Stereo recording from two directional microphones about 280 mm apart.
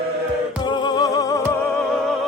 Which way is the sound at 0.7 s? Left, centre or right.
Centre.